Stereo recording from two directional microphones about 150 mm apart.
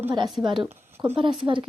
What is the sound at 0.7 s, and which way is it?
Speech, 15° right (ahead or behind).